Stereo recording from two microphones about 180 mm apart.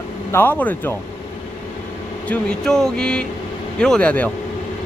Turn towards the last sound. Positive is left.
turn(degrees=10)  # may be behind; listen again after turning